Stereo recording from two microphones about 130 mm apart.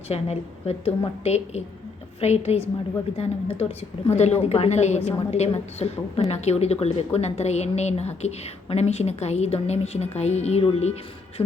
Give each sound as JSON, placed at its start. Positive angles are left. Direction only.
{"t": 0.1, "sound": "a woman's voice", "side_deg": 55}
{"t": 11.4, "sound": "beatboxing", "side_deg": 20}